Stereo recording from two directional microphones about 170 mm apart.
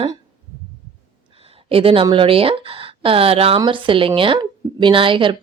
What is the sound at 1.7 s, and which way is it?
Speech, 35° right (ahead or behind).